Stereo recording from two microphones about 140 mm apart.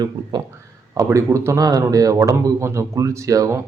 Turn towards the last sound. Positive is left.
turn(degrees=-25)  # may be behind; listen again after turning